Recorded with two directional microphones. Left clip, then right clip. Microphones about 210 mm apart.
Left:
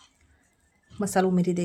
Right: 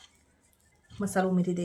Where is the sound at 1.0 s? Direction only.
35° left (ahead or behind).